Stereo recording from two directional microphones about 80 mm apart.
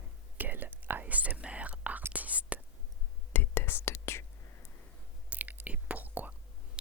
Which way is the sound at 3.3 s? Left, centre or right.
Left.